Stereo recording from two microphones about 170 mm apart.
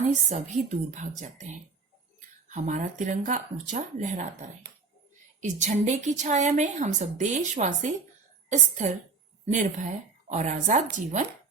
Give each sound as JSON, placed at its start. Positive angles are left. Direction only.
{"t": 0.3, "sound": "a woman's voice", "side_deg": -45}